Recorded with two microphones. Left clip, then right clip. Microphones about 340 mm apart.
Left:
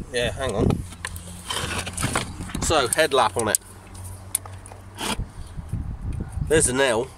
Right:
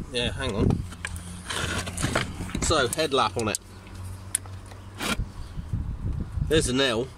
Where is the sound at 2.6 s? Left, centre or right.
Left.